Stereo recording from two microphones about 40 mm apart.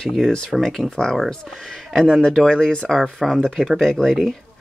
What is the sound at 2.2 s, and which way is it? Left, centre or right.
Speech, centre.